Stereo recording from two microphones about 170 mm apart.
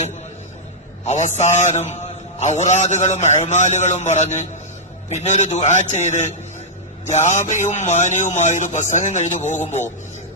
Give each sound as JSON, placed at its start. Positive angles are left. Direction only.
{"t": 1.0, "sound": "a man's voice", "side_deg": 45}